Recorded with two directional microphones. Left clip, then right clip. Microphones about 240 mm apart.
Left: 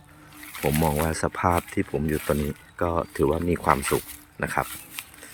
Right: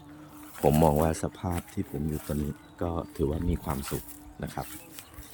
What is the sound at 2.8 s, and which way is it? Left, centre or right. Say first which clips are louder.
Speech: left 8 dB; centre.